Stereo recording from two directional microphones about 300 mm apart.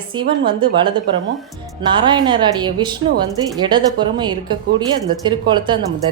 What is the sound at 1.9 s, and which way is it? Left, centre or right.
A woman's voice, centre.